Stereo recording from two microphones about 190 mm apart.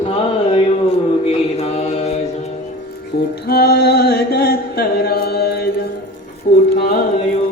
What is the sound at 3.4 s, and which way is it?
Music, 55° left (ahead or behind).